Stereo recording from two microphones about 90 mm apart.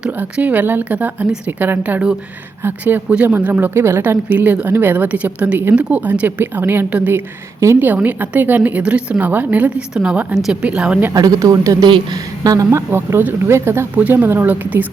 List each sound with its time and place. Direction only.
0.0 s a woman's voice: 15° right (ahead or behind)
11.1 s a woman's voice: 45° right (ahead or behind)
12.9 s a woman's voice: 25° right (ahead or behind)
13.9 s a woman's voice: 20° right (ahead or behind)